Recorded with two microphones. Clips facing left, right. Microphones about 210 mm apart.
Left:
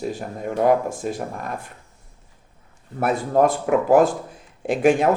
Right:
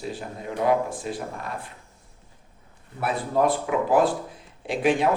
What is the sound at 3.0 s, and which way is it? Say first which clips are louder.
Speech: left 5 dB; 45° left (ahead or behind).